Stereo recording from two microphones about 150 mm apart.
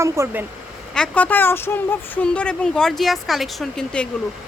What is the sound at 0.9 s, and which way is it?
Speech, 5° left (ahead or behind).